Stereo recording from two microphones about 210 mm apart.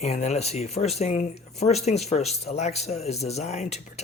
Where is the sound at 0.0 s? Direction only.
30° left (ahead or behind).